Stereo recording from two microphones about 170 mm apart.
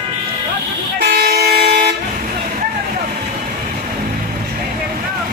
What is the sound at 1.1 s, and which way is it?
Toot, 65° right (ahead or behind).